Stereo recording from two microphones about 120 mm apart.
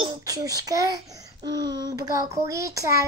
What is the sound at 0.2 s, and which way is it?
A child's voice, 30° right (ahead or behind).